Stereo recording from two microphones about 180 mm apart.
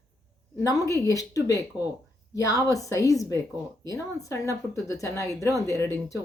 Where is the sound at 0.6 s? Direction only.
20° left (ahead or behind).